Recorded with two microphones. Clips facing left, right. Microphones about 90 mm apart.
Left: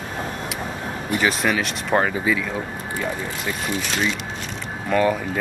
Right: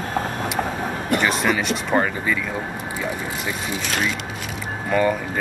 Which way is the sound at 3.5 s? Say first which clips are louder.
Left 2 dB; centre (ahead or behind).